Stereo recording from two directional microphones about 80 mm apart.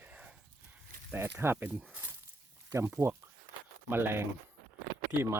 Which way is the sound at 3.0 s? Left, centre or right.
Right.